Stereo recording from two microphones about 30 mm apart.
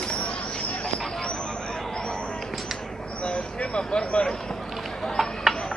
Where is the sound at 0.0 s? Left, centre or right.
Left.